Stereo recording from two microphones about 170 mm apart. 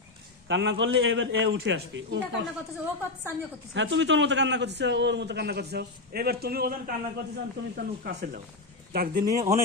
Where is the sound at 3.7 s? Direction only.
90° right; by 9.2 s 60° right (ahead or behind).